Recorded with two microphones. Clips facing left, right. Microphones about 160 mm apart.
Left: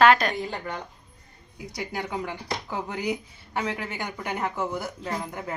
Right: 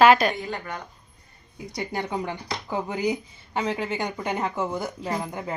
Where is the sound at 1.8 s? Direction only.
25° right (ahead or behind).